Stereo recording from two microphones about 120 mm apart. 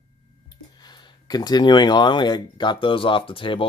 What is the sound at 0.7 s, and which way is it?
Speech, 35° left (ahead or behind).